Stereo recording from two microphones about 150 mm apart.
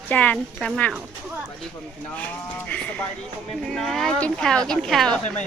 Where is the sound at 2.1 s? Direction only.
10° left (ahead or behind).